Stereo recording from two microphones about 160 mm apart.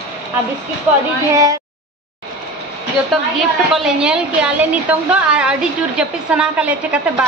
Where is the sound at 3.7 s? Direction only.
5° right (ahead or behind).